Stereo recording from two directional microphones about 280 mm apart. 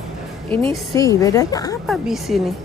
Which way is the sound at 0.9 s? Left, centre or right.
Centre.